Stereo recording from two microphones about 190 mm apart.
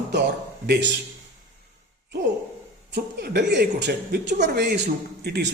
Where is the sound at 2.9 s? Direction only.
60° right (ahead or behind).